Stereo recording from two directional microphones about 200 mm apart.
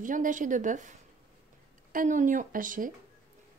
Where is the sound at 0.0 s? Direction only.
40° right (ahead or behind).